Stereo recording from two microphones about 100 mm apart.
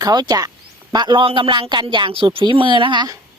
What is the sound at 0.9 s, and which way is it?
A man's voice, 50° right (ahead or behind).